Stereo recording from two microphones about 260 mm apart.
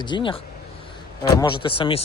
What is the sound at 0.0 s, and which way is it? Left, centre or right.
Speech, centre.